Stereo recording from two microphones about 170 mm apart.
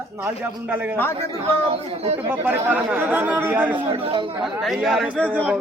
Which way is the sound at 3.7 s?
30° right (ahead or behind).